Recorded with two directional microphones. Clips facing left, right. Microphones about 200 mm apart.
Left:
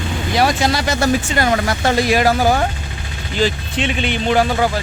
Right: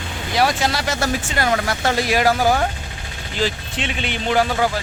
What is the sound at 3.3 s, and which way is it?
Speech, 5° right (ahead or behind).